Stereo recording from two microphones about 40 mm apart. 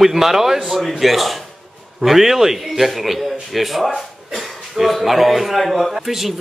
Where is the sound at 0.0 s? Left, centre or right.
Centre.